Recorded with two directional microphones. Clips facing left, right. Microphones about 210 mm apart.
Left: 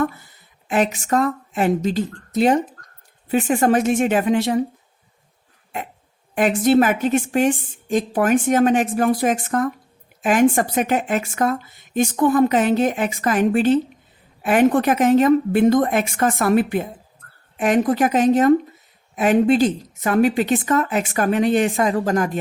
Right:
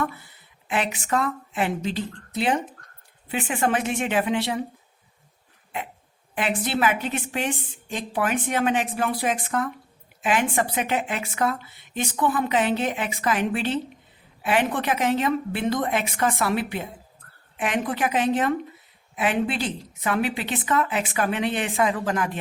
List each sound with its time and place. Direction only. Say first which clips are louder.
0.0 s speech: left 6 dB; 40° left (ahead or behind)
5.7 s speech: left 3 dB; 45° left (ahead or behind)